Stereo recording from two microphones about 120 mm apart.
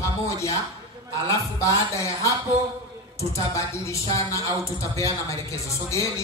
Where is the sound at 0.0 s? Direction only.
25° left (ahead or behind).